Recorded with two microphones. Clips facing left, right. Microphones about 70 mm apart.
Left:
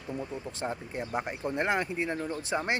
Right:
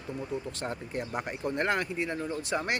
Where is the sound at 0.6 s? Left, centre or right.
Left.